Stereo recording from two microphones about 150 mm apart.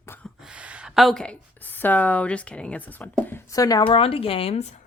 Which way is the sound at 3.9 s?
40° left (ahead or behind).